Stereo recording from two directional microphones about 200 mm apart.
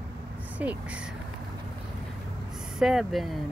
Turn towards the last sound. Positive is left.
turn(degrees=0)  # may be behind; listen again after turning